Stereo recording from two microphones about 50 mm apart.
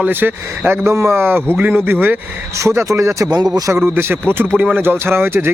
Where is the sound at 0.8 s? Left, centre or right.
Right.